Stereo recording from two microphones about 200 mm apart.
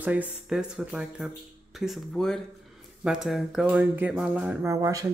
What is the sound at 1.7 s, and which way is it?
Speech, centre (ahead or behind).